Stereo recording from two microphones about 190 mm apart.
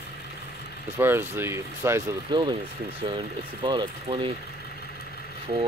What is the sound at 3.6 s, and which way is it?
Speech, 25° right (ahead or behind).